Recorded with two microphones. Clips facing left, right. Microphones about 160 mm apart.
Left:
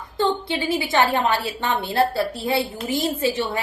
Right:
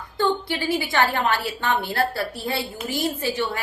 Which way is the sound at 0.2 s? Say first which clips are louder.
Left 1 dB; 25° left (ahead or behind).